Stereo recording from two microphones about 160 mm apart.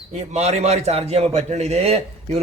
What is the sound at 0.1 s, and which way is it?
A man's voice, 45° right (ahead or behind).